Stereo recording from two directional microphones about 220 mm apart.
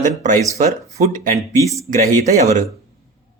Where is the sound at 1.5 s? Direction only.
15° left (ahead or behind).